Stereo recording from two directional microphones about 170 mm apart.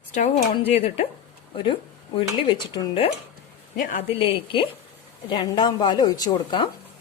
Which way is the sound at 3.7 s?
50° left (ahead or behind).